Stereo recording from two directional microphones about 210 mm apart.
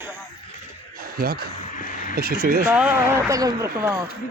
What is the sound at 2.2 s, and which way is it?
Speech, 40° right (ahead or behind).